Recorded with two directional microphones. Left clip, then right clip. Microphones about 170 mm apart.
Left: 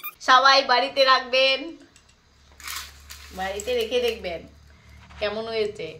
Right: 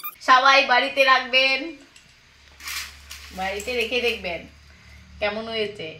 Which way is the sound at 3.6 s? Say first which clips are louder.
Left 1 dB; 25° left (ahead or behind).